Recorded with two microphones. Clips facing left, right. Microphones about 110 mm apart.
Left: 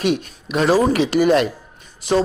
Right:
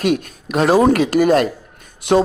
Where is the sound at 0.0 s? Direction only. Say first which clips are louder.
Right 2 dB; 50° right (ahead or behind).